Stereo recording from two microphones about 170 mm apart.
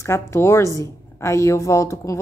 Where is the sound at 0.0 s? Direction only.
15° left (ahead or behind).